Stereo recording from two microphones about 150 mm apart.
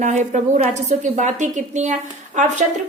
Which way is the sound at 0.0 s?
55° right (ahead or behind).